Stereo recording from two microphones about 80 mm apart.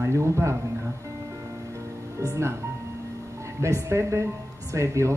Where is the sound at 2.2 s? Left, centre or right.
Right.